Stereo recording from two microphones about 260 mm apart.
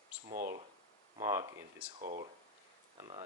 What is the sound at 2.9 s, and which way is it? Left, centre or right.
Speech, centre.